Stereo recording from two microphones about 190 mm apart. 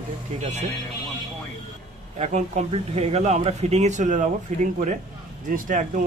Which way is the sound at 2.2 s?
40° right (ahead or behind).